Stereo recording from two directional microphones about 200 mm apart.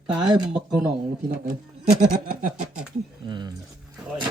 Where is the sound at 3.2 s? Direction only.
20° right (ahead or behind).